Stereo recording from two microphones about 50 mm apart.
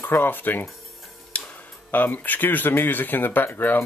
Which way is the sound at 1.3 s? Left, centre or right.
Left.